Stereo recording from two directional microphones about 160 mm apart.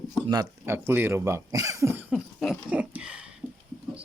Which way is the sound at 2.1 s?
5° right (ahead or behind).